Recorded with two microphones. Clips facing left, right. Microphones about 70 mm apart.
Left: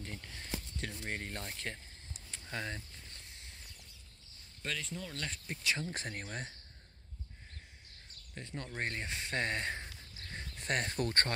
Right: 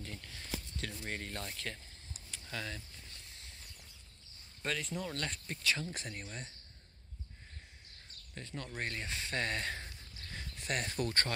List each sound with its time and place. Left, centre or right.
0.0 s speech: left
2.3 s a sound: left
4.6 s speech: centre
5.1 s speech: centre
5.5 s speech: centre
5.9 s speech: left
8.4 s speech: left
10.3 s speech: left